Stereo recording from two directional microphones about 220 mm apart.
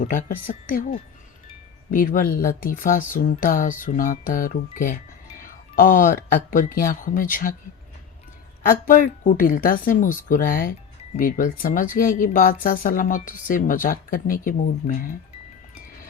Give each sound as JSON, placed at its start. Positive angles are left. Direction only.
{"t": 0.0, "sound": "speech", "side_deg": 40}
{"t": 8.6, "sound": "speech", "side_deg": 40}